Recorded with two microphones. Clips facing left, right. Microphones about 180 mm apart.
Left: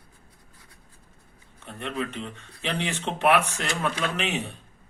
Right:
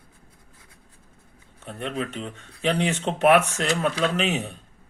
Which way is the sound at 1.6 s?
40° right (ahead or behind).